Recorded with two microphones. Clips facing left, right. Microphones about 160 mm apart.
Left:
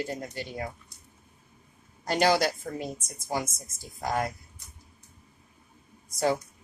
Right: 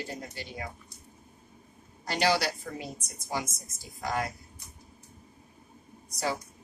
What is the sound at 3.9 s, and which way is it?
Speech, 45° left (ahead or behind).